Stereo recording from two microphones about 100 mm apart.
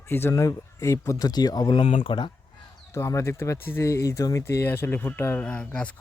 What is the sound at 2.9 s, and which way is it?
Speech, 30° left (ahead or behind).